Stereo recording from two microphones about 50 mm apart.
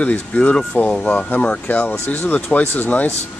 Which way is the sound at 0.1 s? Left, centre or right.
Left.